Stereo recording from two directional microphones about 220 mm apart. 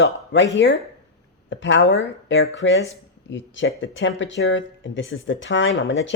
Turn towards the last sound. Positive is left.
turn(degrees=60)  # may be behind; listen again after turning